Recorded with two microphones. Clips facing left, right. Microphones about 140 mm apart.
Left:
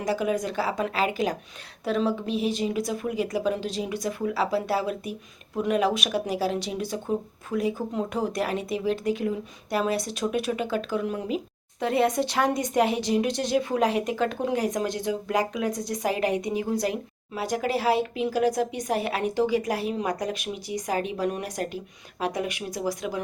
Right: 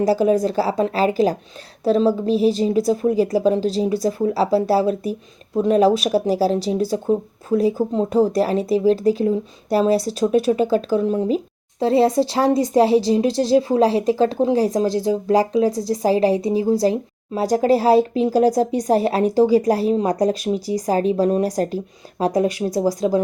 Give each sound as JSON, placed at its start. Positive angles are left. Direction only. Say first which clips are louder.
{"t": 0.0, "sound": "speech", "louder": "right 9 dB", "side_deg": -35}